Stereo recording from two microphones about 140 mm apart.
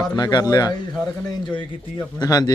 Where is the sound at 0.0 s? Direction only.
30° left (ahead or behind).